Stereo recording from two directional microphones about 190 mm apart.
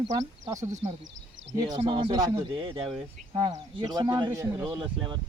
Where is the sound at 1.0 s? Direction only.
75° right (ahead or behind).